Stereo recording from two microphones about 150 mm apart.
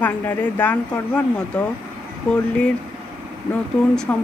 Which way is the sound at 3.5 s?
15° left (ahead or behind).